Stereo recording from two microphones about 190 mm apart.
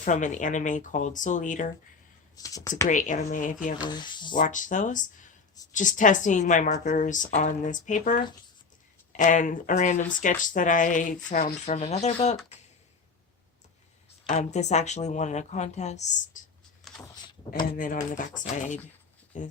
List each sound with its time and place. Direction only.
0.0 s a woman's voice: 40° left (ahead or behind)
2.3 s speech: 20° left (ahead or behind)
2.9 s speech: 40° left (ahead or behind)
3.8 s speech: 25° left (ahead or behind)
4.4 s a woman's voice: 45° left (ahead or behind)
14.3 s a woman's voice: 35° left (ahead or behind)
16.9 s a sound: centre (ahead or behind)
17.7 s a woman's voice: 45° left (ahead or behind)